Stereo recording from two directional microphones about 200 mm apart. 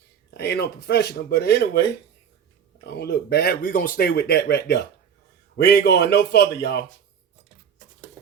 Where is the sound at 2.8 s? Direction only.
55° left (ahead or behind).